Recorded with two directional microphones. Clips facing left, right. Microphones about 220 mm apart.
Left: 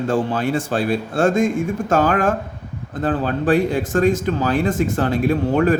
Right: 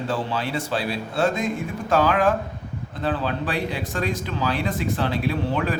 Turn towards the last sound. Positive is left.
turn(degrees=45)  # may be behind; listen again after turning